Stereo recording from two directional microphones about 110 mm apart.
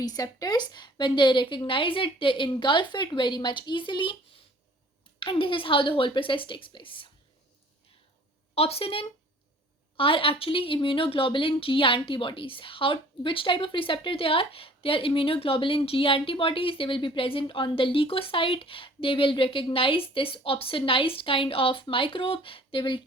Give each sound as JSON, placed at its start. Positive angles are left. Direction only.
{"t": 0.0, "sound": "a woman's voice", "side_deg": 35}
{"t": 5.2, "sound": "a woman's voice", "side_deg": 50}
{"t": 8.5, "sound": "speech", "side_deg": 65}